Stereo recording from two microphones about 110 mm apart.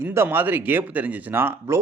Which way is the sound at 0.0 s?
20° right (ahead or behind).